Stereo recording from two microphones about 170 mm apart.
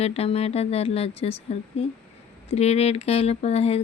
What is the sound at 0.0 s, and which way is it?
A woman's voice, 35° left (ahead or behind).